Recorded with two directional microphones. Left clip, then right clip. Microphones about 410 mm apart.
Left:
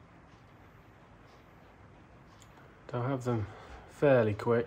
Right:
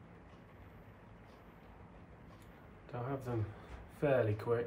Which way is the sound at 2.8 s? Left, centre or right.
Left.